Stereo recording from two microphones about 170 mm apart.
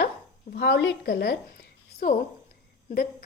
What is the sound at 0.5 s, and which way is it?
A woman's voice, 85° left.